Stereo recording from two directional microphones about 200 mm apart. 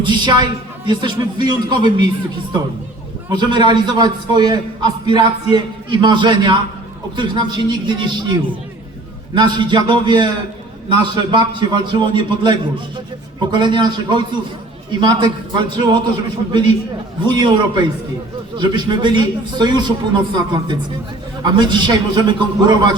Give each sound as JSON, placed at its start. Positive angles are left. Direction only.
{"t": 0.0, "sound": "a man's voice", "side_deg": -20}
{"t": 3.2, "sound": "a man's voice", "side_deg": -20}